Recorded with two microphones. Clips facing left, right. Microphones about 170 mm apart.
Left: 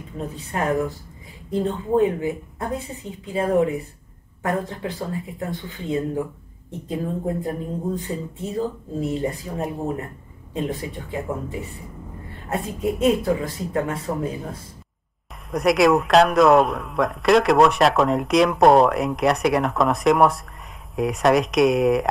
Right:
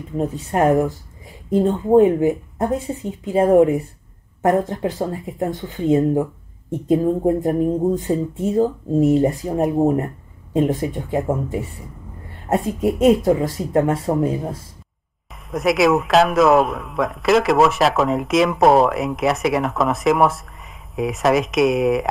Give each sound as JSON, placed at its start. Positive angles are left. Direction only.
{"t": 0.2, "sound": "speech", "side_deg": -45}
{"t": 7.4, "sound": "speech", "side_deg": -45}
{"t": 15.5, "sound": "speech", "side_deg": 0}